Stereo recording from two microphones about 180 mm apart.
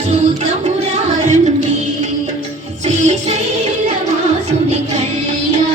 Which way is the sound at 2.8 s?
40° right (ahead or behind).